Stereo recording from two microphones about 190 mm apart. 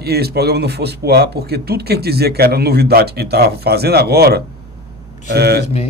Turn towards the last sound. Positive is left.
turn(degrees=-55)  # may be behind; listen again after turning